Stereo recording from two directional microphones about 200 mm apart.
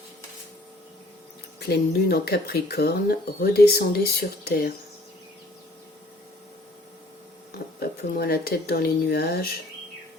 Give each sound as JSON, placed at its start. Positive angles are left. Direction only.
{"t": 1.5, "sound": "speech", "side_deg": 55}
{"t": 7.8, "sound": "speech", "side_deg": 50}